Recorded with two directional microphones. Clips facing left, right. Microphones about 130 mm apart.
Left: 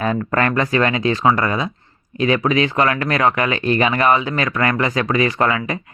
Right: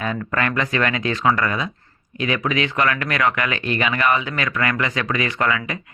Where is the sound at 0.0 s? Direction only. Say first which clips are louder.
Left 5 dB; 40° left (ahead or behind).